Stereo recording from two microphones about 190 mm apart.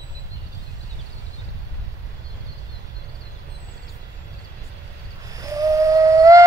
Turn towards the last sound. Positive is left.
turn(degrees=-15)  # may be behind; listen again after turning